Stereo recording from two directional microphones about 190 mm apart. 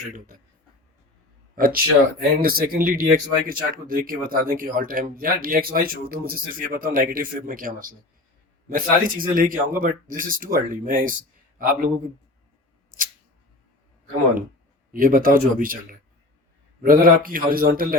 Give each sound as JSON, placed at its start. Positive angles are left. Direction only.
{"t": 1.5, "sound": "a man's voice", "side_deg": -50}
{"t": 14.9, "sound": "speech", "side_deg": -45}